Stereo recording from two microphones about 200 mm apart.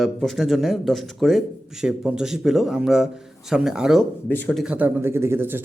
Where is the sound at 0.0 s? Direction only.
Centre (ahead or behind).